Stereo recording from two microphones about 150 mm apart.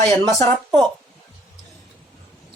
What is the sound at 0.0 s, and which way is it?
Speech, 20° left (ahead or behind).